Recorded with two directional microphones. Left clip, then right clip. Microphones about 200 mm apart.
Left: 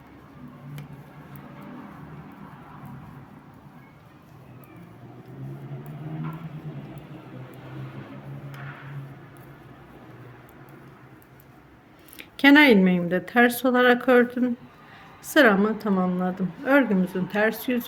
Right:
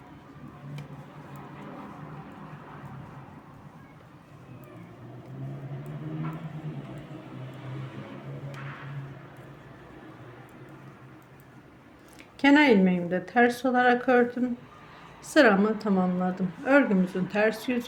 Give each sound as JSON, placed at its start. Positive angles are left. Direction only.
{"t": 12.1, "sound": "a woman's voice", "side_deg": 25}